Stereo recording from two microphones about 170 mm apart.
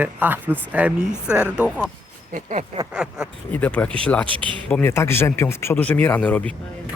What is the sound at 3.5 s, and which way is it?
Speech, 10° left (ahead or behind).